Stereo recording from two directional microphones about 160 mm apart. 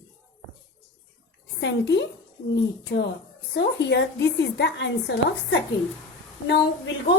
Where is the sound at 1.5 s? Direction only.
90° left.